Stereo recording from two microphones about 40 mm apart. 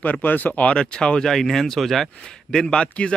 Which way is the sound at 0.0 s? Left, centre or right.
Left.